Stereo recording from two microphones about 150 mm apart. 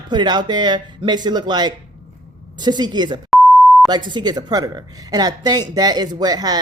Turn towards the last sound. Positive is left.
turn(degrees=-25)  # may be behind; listen again after turning